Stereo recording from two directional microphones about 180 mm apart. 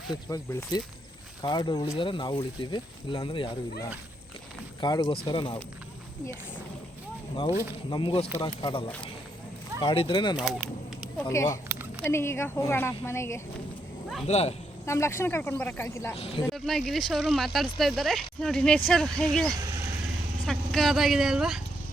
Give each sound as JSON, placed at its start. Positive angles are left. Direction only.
{"t": 0.3, "sound": "speech", "side_deg": 20}
{"t": 7.9, "sound": "speech", "side_deg": 25}
{"t": 9.8, "sound": "speech", "side_deg": 30}
{"t": 10.3, "sound": "speech", "side_deg": 0}
{"t": 11.3, "sound": "speech", "side_deg": 15}
{"t": 11.7, "sound": "a sound", "side_deg": -10}
{"t": 12.0, "sound": "speech", "side_deg": 15}
{"t": 14.3, "sound": "speech", "side_deg": 35}
{"t": 14.8, "sound": "speech", "side_deg": 15}
{"t": 16.1, "sound": "speech", "side_deg": 35}
{"t": 16.6, "sound": "speech", "side_deg": 0}